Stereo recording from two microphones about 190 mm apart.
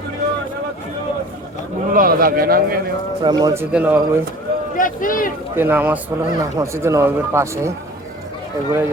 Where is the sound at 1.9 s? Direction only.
50° right (ahead or behind).